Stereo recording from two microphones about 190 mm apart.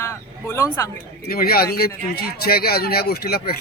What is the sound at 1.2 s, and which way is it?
Speech, 50° left (ahead or behind).